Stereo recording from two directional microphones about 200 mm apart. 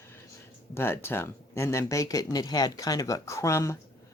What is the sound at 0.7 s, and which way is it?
Speech, 10° left (ahead or behind).